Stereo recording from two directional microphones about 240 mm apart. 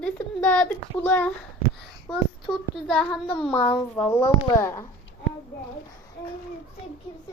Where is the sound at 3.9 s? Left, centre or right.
Centre.